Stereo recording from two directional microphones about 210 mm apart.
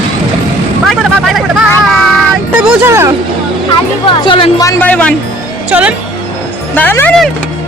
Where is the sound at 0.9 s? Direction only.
Centre (ahead or behind).